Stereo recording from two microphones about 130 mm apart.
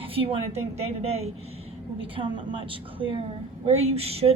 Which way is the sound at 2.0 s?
40° right (ahead or behind).